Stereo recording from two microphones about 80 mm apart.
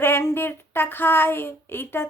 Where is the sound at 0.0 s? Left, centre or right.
Left.